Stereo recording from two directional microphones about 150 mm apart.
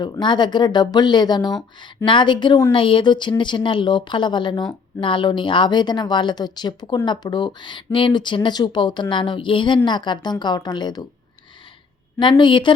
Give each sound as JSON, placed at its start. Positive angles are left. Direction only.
{"t": 0.0, "sound": "speech", "side_deg": 30}
{"t": 12.2, "sound": "speech", "side_deg": 35}